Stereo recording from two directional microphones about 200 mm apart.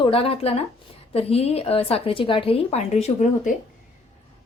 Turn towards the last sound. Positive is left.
turn(degrees=35)  # may be behind; listen again after turning